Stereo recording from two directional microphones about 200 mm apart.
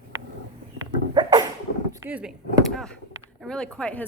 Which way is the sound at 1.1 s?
20° right (ahead or behind).